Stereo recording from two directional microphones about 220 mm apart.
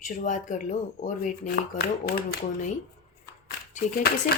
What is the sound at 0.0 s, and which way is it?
Speech, 35° left (ahead or behind).